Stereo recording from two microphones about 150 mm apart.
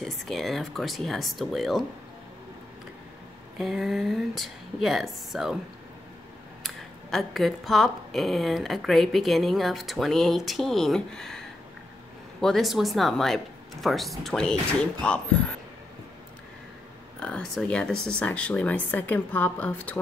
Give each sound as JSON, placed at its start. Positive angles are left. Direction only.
{"t": 0.0, "sound": "speech", "side_deg": 0}
{"t": 3.5, "sound": "speech", "side_deg": 0}
{"t": 6.6, "sound": "speech", "side_deg": 0}
{"t": 17.2, "sound": "speech", "side_deg": 5}